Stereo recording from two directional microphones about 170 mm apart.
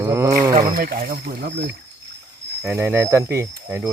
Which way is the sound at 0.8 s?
60° right (ahead or behind).